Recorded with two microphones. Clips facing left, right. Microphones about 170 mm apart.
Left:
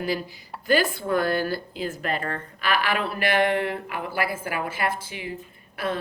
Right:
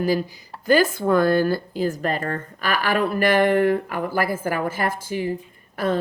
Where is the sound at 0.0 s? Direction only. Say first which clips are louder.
Right 6 dB; 40° right (ahead or behind).